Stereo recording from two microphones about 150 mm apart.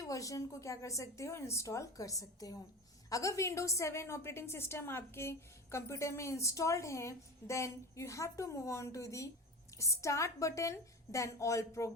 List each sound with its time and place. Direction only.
0.0 s a woman's voice: 20° left (ahead or behind)